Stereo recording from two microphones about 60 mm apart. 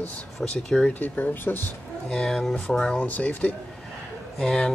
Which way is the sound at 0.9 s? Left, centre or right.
Left.